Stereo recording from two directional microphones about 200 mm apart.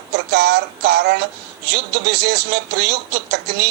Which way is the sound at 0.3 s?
55° right (ahead or behind).